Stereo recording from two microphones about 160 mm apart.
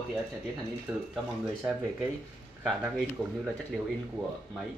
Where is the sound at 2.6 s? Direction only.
5° right (ahead or behind).